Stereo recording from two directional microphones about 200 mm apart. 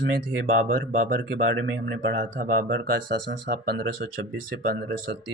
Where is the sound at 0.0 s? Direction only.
60° right (ahead or behind).